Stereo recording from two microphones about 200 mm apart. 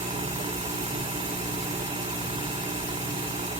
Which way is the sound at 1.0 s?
30° right (ahead or behind).